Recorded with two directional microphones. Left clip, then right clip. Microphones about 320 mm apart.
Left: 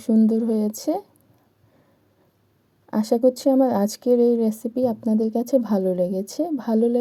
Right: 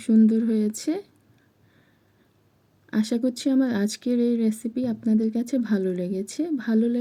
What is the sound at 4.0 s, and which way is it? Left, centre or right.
Speech, left.